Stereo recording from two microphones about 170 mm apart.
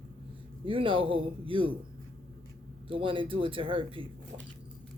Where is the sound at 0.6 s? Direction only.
30° right (ahead or behind).